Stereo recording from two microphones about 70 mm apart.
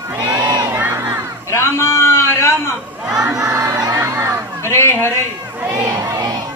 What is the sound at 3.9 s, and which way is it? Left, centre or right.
Crowd, right.